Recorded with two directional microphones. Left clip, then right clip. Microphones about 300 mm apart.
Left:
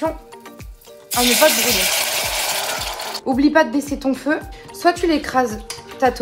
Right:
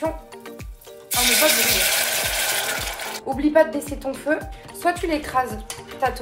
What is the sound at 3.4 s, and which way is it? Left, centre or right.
Speech, left.